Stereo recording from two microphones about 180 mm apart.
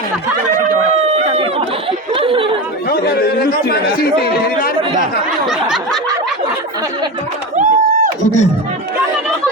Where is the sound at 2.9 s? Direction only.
60° left (ahead or behind).